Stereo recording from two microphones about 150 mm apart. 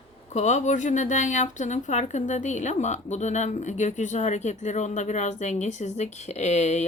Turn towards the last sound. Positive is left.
turn(degrees=50)  # may be behind; listen again after turning